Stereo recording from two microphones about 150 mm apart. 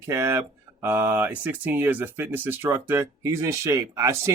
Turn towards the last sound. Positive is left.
turn(degrees=-20)  # may be behind; listen again after turning